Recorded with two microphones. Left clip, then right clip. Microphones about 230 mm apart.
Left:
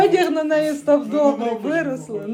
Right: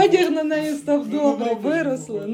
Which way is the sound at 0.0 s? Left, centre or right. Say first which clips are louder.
Even; centre.